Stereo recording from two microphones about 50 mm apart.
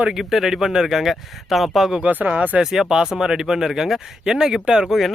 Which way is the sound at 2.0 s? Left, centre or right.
Right.